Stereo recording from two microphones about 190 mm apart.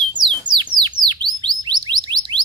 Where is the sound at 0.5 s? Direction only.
25° right (ahead or behind).